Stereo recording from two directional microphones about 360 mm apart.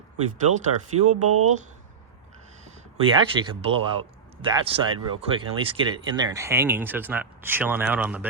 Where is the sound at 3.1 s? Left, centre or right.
Centre.